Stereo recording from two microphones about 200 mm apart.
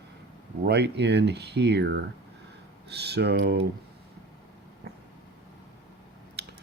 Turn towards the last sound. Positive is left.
turn(degrees=-55)  # may be behind; listen again after turning